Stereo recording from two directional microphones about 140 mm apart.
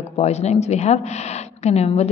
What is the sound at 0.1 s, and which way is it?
A woman's voice, 50° left (ahead or behind).